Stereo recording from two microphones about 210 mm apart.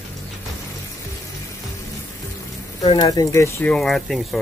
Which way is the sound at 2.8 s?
25° left (ahead or behind).